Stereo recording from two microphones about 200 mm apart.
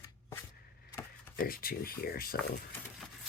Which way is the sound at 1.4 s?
45° left (ahead or behind).